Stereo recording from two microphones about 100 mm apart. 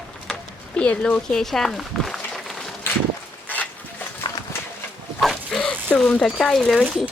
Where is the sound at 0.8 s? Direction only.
10° left (ahead or behind).